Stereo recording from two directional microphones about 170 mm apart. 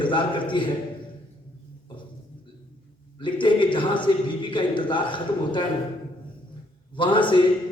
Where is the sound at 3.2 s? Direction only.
30° left (ahead or behind).